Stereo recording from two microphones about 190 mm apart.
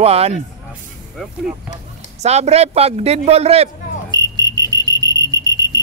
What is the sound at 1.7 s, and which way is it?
A man's voice, 35° right (ahead or behind).